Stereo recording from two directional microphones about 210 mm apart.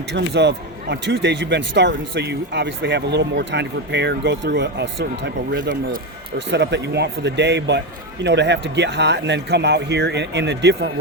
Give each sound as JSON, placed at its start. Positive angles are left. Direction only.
{"t": 0.1, "sound": "a man's voice", "side_deg": -55}